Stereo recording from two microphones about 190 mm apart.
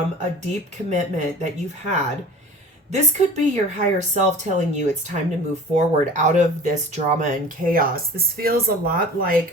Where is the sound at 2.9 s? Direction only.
40° right (ahead or behind).